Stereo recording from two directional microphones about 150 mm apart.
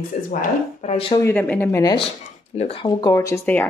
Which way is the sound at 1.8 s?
35° left (ahead or behind).